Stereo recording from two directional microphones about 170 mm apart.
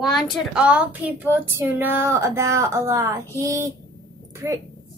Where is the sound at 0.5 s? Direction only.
5° right (ahead or behind).